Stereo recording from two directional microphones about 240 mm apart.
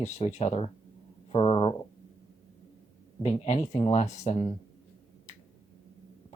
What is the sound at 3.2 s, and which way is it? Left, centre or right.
Speech, left.